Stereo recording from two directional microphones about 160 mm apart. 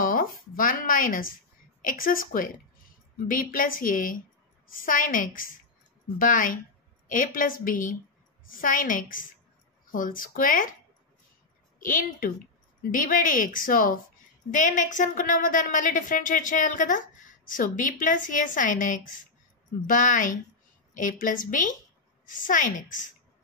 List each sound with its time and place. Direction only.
0.0 s a woman's voice: 60° left (ahead or behind)
11.8 s a woman's voice: 55° left (ahead or behind)